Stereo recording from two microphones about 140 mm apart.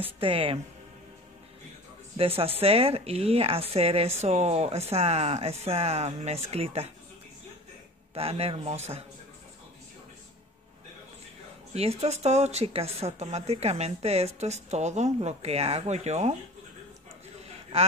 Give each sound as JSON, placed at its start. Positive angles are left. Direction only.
{"t": 0.2, "sound": "speech", "side_deg": -40}
{"t": 2.1, "sound": "speech", "side_deg": -40}
{"t": 8.1, "sound": "speech", "side_deg": -45}
{"t": 11.7, "sound": "speech", "side_deg": -50}